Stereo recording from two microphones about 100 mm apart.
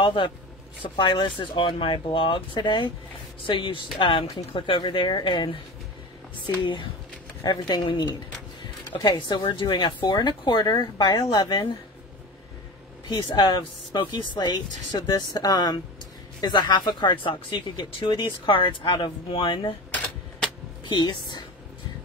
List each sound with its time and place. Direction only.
0.0 s speech: 55° left (ahead or behind)
6.6 s speech: 50° left (ahead or behind)
13.1 s speech: 45° left (ahead or behind)
20.9 s speech: 45° left (ahead or behind)